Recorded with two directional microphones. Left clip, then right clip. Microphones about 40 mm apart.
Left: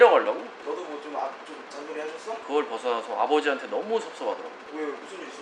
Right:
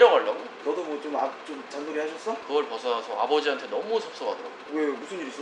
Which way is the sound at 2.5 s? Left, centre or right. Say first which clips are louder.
Left 1 dB; left.